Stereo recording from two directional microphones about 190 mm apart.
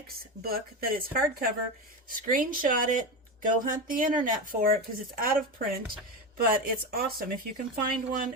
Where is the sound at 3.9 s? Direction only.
45° right (ahead or behind).